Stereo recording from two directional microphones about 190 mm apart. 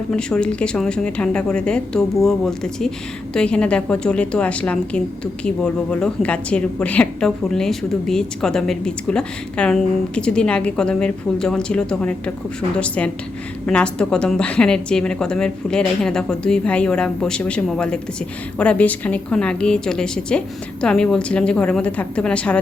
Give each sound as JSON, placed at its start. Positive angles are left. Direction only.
{"t": 0.1, "sound": "a woman's voice", "side_deg": 5}